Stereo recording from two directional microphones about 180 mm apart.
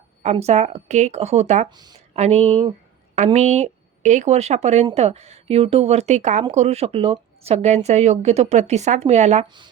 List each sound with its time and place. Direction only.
0.2 s a woman's voice: 40° right (ahead or behind)
1.7 s speech: 25° right (ahead or behind)
2.1 s a woman's voice: 35° right (ahead or behind)